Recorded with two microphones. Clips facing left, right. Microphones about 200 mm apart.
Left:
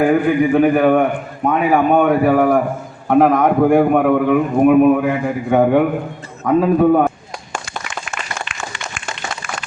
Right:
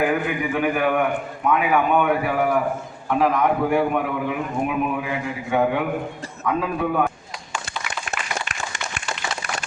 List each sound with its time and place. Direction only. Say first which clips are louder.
0.0 s a man's voice: left 8 dB; 40° left (ahead or behind)